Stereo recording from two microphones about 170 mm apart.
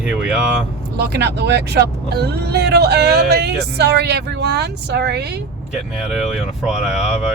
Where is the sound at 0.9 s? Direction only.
75° right (ahead or behind).